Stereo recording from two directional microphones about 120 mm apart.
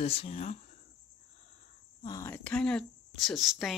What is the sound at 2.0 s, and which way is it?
Speech, 35° left (ahead or behind).